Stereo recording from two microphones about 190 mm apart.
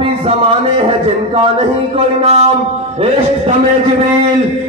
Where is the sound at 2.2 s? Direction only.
35° right (ahead or behind).